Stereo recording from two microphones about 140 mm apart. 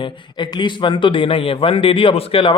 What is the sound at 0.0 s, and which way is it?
Speech, 35° left (ahead or behind).